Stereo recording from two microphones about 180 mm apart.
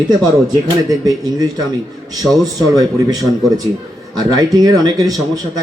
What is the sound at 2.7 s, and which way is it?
Speech, 20° right (ahead or behind).